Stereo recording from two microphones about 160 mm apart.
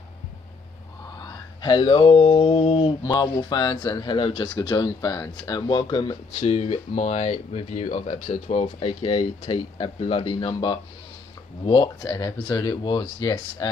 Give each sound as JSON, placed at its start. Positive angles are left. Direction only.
{"t": 1.2, "sound": "speech", "side_deg": 30}